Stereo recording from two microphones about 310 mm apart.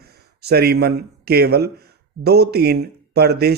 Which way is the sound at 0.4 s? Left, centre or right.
Right.